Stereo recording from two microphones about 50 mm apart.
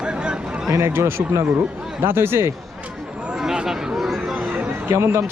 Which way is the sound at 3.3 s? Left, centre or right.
Centre.